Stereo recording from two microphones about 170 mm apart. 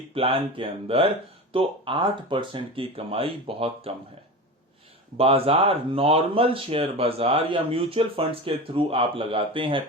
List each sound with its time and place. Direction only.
0.1 s speech: 30° right (ahead or behind)
5.1 s speech: 35° right (ahead or behind)